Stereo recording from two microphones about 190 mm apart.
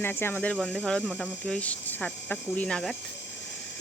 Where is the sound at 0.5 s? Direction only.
Centre (ahead or behind).